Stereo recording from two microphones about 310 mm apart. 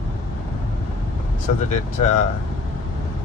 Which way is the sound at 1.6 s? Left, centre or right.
Left.